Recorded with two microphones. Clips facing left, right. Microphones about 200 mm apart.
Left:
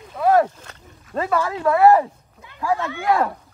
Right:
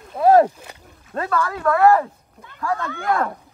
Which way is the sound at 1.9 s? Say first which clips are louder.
Left 1 dB; 15° left (ahead or behind).